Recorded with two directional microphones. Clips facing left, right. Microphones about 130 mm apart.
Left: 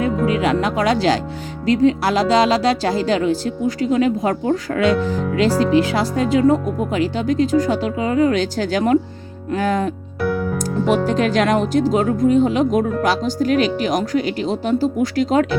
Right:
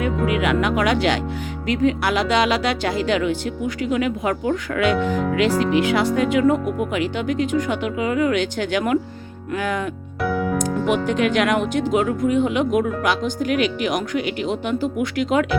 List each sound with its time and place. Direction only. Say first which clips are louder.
0.0 s speech: left 3 dB; 35° left (ahead or behind)